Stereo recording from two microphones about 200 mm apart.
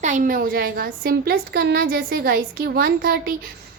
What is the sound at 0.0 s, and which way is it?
A woman's voice, 40° right (ahead or behind).